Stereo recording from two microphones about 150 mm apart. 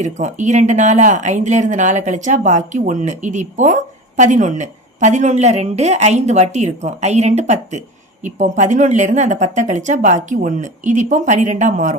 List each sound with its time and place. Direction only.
0.0 s speech: 55° right (ahead or behind)